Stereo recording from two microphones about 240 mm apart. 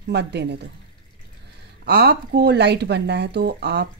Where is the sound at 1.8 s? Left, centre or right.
Right.